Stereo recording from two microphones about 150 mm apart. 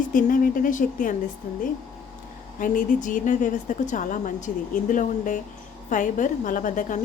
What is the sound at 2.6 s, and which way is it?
A woman's voice, 60° left (ahead or behind).